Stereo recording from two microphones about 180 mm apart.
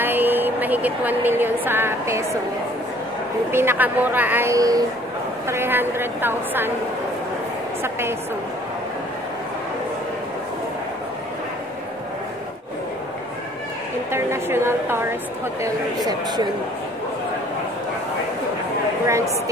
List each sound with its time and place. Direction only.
0.0 s a woman's voice: 10° right (ahead or behind)
3.5 s speech: 10° right (ahead or behind)
14.1 s speech: 15° right (ahead or behind)